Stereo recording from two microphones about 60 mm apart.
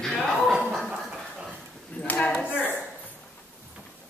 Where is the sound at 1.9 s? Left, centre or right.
Left.